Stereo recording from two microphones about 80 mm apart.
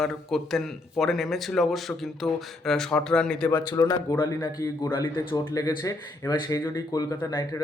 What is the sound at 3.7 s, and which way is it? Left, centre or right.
Speech, left.